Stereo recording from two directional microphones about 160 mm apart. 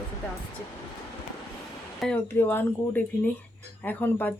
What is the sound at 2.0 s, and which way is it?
Speech, 5° left (ahead or behind).